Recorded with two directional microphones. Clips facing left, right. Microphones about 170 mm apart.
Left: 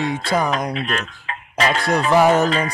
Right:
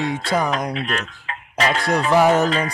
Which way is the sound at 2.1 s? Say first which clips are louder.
Left 1 dB; 25° left (ahead or behind).